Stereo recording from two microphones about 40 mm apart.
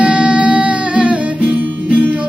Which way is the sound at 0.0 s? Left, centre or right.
Right.